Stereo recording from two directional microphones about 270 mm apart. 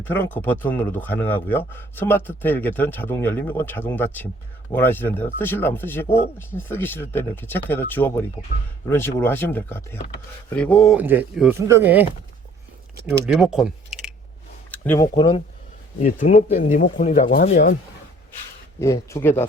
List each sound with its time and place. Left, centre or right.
0.0 s speech: centre
13.2 s speech: centre
14.7 s a sound: centre
15.1 s speech: centre
18.8 s speech: centre